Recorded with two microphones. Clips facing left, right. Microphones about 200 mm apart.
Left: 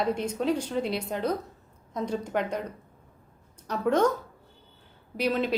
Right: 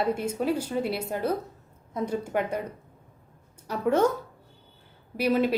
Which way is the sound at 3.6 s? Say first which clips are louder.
Right 1 dB; 10° right (ahead or behind).